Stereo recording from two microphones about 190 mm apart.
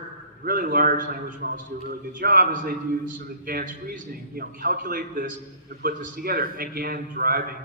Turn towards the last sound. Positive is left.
turn(degrees=-50)  # may be behind; listen again after turning